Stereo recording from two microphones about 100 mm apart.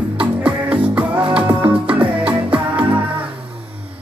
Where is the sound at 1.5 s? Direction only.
55° right (ahead or behind).